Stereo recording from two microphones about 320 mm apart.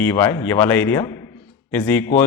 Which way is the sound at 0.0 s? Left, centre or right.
Centre.